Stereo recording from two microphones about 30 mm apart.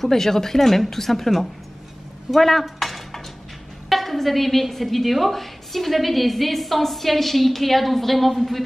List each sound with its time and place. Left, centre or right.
0.0 s a woman's voice: centre
2.3 s a woman's voice: centre